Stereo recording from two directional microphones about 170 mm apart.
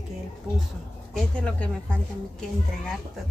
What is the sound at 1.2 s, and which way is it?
Speech, 5° left (ahead or behind).